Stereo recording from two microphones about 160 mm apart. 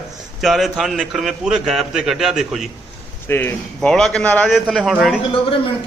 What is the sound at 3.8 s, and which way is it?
Speech, 5° left (ahead or behind).